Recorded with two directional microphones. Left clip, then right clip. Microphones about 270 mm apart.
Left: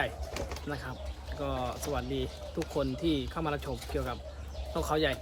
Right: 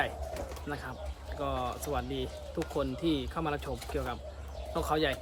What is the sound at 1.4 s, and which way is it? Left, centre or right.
Speech, centre.